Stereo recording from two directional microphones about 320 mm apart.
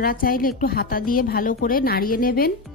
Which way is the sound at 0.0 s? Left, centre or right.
Left.